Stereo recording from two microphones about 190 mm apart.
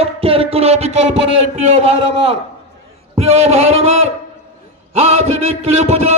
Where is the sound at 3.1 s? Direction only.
35° right (ahead or behind).